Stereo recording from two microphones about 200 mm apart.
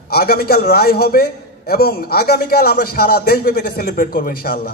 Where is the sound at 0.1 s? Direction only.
50° left (ahead or behind).